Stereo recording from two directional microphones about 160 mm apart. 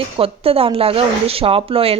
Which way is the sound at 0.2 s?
35° right (ahead or behind).